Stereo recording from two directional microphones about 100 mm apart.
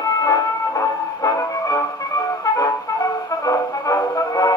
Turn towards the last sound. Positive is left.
turn(degrees=35)  # may be behind; listen again after turning